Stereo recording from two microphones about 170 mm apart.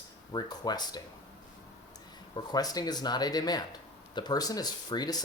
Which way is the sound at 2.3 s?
25° left (ahead or behind).